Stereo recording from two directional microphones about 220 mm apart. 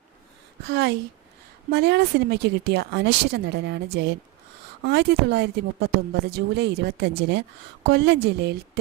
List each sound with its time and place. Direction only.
0.7 s speech: 50° right (ahead or behind)